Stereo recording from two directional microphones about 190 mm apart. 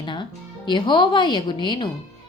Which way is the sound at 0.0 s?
25° left (ahead or behind).